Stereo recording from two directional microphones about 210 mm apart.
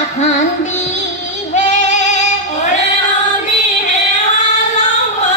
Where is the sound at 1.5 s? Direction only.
35° left (ahead or behind).